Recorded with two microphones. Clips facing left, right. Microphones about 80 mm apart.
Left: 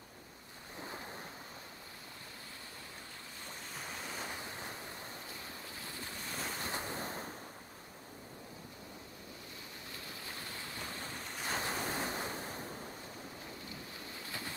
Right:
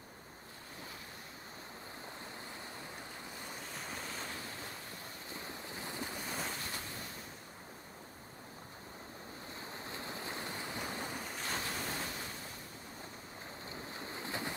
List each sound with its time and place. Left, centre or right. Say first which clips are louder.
3.7 s waves: left 2 dB; centre
5.3 s waves: right 2 dB; right; by 6.5 s centre
6.6 s waves: left 5 dB; left
9.8 s waves: right 5 dB; right
11.1 s ocean: right 2 dB; centre
11.6 s waves: left 3 dB; left
13.7 s waves: right 3 dB; right